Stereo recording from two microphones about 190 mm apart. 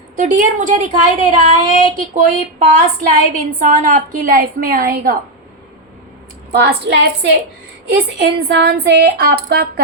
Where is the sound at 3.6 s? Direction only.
40° right (ahead or behind).